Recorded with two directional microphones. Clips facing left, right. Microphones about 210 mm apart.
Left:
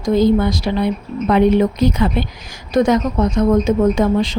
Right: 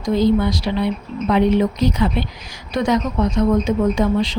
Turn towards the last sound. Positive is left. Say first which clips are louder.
# left 2 dB
turn(degrees=50)  # may be behind; listen again after turning